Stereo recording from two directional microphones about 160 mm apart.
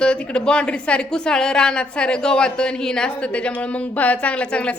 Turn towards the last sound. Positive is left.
turn(degrees=5)  # may be behind; listen again after turning